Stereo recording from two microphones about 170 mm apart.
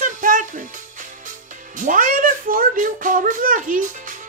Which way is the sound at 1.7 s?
50° right (ahead or behind).